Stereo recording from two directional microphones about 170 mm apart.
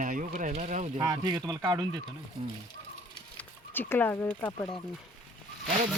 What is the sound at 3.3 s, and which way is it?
Speech, 10° left (ahead or behind).